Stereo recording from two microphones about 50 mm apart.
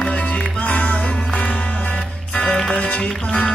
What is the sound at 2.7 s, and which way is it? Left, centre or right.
Music, left.